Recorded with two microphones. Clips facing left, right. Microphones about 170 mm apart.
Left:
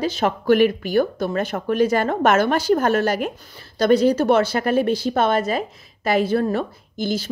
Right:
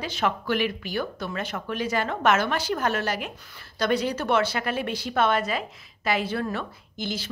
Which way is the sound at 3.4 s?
35° left (ahead or behind).